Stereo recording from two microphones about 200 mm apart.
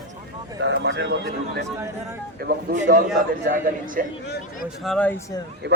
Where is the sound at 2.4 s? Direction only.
55° right (ahead or behind).